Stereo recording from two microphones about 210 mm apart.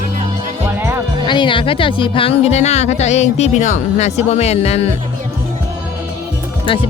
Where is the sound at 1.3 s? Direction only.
20° left (ahead or behind).